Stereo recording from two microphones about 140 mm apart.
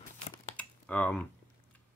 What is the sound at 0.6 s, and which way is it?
Computer keyboard, 10° left (ahead or behind).